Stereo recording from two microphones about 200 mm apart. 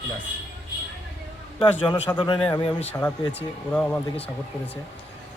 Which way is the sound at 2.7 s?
10° left (ahead or behind).